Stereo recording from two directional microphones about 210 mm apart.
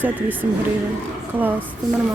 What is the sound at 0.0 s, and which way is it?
Speech, 10° right (ahead or behind).